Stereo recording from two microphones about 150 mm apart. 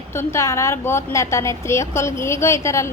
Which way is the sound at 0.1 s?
20° left (ahead or behind).